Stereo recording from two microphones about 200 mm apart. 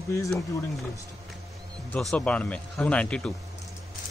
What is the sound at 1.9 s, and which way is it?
Speech, 5° left (ahead or behind).